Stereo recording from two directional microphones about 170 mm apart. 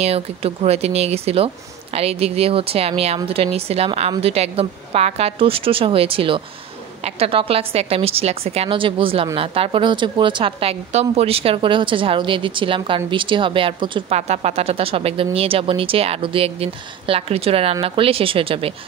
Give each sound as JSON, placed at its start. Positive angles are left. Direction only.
{"t": 0.0, "sound": "a woman's voice", "side_deg": -35}